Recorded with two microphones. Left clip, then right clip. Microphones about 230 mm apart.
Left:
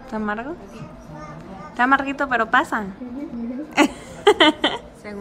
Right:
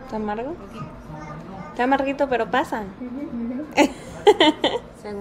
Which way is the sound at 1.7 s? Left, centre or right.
Centre.